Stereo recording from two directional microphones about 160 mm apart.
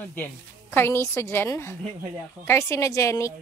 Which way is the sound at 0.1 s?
15° left (ahead or behind).